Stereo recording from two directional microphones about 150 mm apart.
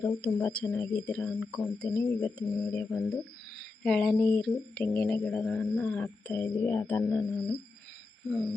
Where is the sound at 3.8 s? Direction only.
5° left (ahead or behind).